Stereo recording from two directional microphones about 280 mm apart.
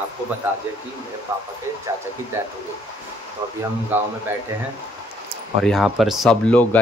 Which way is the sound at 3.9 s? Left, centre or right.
Centre.